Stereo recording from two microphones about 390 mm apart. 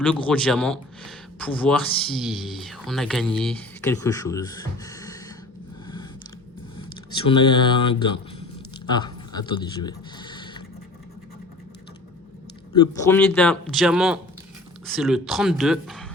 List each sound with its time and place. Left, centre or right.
0.2 s speech: centre
6.7 s speech: centre
8.9 s a sound: centre
12.7 s speech: centre